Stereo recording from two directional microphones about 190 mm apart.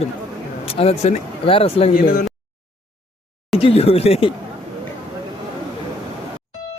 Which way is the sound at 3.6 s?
30° left (ahead or behind).